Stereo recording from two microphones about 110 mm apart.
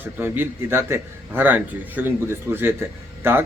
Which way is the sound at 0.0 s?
20° right (ahead or behind).